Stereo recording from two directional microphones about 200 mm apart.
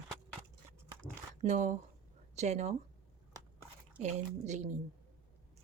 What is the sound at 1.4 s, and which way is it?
Speech, 35° right (ahead or behind).